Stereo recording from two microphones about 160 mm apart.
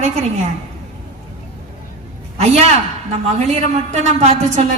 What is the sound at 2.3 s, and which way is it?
Speech, 40° right (ahead or behind).